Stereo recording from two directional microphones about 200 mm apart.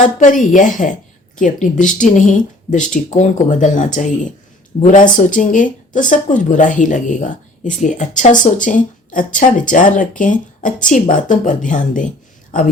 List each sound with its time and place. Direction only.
0.0 s speech: 40° left (ahead or behind)